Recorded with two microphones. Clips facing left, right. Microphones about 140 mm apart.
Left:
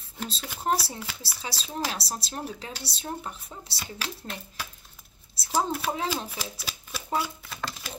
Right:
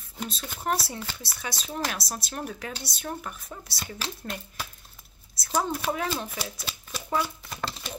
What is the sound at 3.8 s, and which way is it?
Speech, 10° left (ahead or behind).